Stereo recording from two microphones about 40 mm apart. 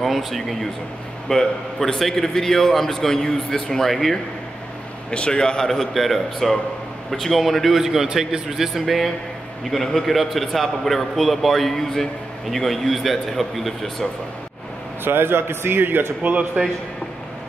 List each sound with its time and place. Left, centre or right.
0.0 s a man's voice: centre
5.1 s a man's voice: left
5.7 s a man's voice: centre
7.8 s a man's voice: centre
15.0 s a man's voice: right
16.2 s a man's voice: right